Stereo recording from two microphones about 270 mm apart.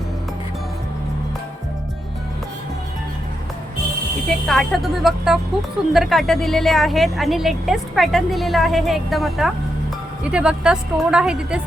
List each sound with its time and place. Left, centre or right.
4.4 s a woman's voice: centre